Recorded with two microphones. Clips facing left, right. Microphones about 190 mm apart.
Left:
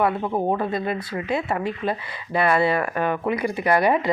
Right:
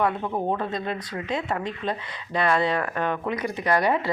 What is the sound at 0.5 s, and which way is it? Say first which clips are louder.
A woman's voice: left 4 dB; 10° left (ahead or behind).